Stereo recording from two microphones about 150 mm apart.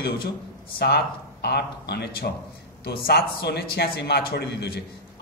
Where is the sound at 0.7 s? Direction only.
90° left.